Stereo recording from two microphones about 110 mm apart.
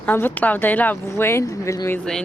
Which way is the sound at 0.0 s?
20° left (ahead or behind).